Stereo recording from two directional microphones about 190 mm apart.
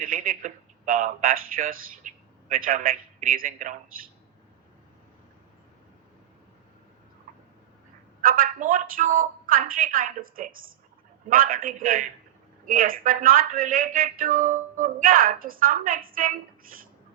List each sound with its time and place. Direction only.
0.0 s speech: 45° right (ahead or behind)
8.2 s speech: 50° right (ahead or behind)